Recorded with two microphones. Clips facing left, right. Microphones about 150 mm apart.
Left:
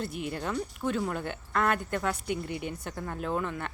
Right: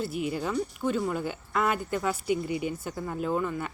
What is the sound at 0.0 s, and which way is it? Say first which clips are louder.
Speech: right 4 dB; 5° right (ahead or behind).